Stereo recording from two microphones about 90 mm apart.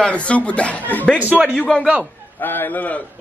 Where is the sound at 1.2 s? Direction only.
15° right (ahead or behind).